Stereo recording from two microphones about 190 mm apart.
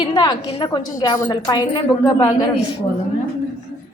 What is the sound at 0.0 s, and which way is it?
A woman's voice, 20° left (ahead or behind).